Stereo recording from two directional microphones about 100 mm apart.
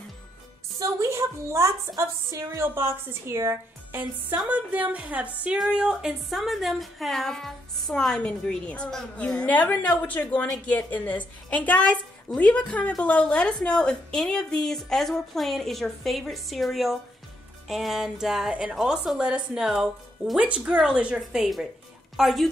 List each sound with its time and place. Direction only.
0.7 s a woman's voice: 30° right (ahead or behind); by 22.5 s centre (ahead or behind)